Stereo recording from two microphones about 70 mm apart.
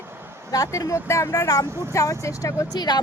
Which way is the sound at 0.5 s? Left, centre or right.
Left.